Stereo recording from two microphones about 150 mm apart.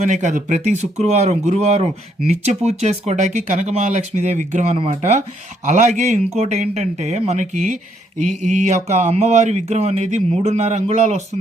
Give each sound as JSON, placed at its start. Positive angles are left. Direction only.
{"t": 0.0, "sound": "speech", "side_deg": -55}